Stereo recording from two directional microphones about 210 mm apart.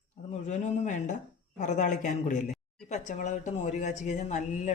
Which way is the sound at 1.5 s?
35° left (ahead or behind).